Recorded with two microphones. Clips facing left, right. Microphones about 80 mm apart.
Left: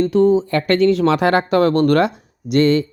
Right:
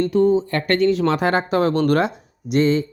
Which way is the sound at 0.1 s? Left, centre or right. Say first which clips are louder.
Left 3 dB; left.